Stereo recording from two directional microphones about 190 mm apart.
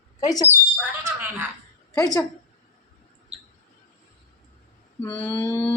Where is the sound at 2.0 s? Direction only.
20° left (ahead or behind).